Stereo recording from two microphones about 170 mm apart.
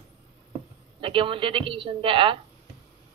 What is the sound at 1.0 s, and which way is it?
A woman's voice, 30° right (ahead or behind).